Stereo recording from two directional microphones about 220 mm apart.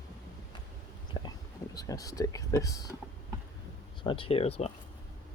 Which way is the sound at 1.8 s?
15° left (ahead or behind).